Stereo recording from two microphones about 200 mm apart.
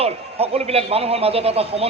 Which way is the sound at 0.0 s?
30° right (ahead or behind).